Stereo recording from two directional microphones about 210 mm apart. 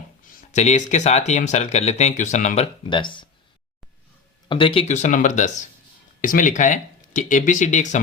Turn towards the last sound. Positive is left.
turn(degrees=35)  # may be behind; listen again after turning